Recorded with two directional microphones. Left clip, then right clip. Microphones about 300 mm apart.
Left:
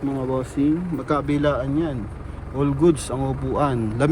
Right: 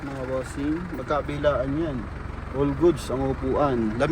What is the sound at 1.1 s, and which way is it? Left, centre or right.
Speech, left.